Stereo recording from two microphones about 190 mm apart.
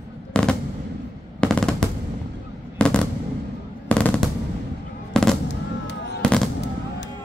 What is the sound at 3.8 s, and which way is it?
Machine gun, 5° left (ahead or behind).